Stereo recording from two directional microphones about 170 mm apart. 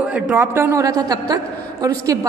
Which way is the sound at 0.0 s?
10° right (ahead or behind).